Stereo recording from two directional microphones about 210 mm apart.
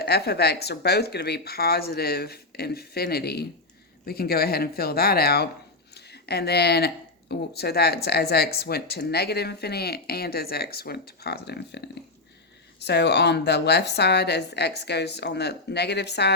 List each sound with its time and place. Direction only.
0.0 s speech: 50° left (ahead or behind)
12.8 s speech: 55° left (ahead or behind)